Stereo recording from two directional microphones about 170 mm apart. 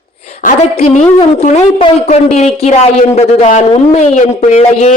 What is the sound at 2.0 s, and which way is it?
A woman's voice, 40° left (ahead or behind).